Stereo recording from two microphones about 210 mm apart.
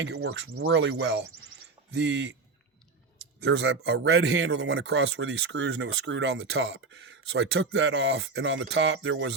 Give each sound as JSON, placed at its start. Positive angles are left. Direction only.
{"t": 0.0, "sound": "speech", "side_deg": -55}
{"t": 3.4, "sound": "speech", "side_deg": -55}